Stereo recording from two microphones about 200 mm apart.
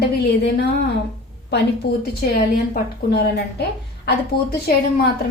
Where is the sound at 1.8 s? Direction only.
55° left (ahead or behind).